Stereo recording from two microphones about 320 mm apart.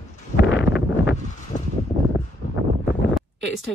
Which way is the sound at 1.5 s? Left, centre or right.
Left.